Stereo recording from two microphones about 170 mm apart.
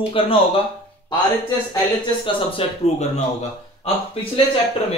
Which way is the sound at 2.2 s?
30° left (ahead or behind).